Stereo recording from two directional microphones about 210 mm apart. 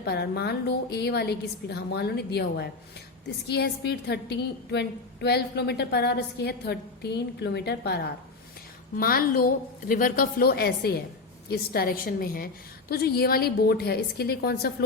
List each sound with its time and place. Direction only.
0.0 s a woman's voice: 50° left (ahead or behind)